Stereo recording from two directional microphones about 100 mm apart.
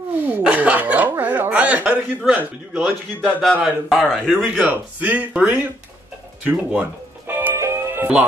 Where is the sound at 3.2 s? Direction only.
5° left (ahead or behind).